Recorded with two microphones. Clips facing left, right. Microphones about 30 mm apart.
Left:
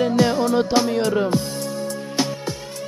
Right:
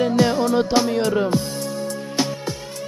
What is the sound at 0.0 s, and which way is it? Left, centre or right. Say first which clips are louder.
Music: even; centre.